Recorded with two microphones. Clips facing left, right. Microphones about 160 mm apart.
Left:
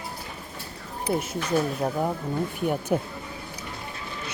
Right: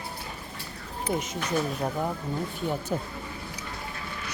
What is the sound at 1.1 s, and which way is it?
Speech, 5° left (ahead or behind).